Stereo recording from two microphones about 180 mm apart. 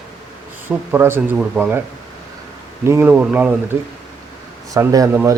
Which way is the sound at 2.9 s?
10° right (ahead or behind).